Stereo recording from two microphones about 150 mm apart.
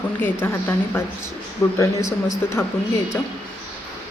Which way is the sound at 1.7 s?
20° left (ahead or behind).